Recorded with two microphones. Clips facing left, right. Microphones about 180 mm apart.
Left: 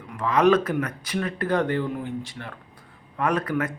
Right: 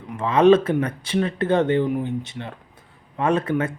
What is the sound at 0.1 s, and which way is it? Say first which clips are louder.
Speech: right 4 dB; 25° right (ahead or behind).